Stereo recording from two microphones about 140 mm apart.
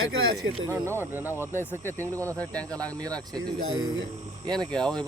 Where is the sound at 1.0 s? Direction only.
15° right (ahead or behind).